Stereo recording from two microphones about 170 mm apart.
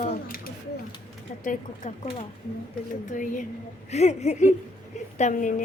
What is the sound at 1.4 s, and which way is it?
Speech, 45° left (ahead or behind).